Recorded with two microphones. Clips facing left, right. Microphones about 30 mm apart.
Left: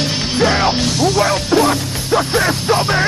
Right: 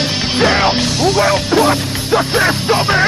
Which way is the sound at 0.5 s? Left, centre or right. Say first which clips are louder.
Right 2 dB; centre.